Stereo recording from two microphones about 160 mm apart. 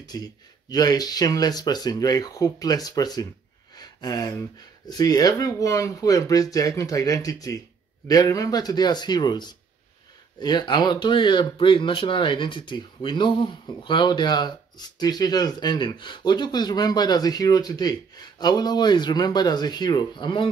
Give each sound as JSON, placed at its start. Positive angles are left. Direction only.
{"t": 0.0, "sound": "speech", "side_deg": 25}